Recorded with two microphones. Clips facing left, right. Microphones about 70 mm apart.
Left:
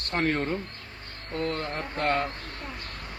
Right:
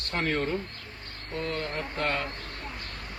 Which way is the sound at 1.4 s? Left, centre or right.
Left.